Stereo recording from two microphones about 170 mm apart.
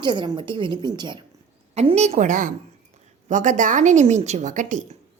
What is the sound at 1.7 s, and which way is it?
A woman's voice, 40° right (ahead or behind).